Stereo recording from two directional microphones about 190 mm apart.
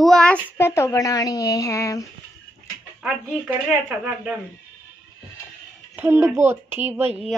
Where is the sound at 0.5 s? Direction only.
15° left (ahead or behind).